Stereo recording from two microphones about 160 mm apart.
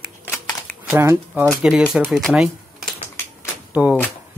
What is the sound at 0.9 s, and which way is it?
Speech, 15° right (ahead or behind).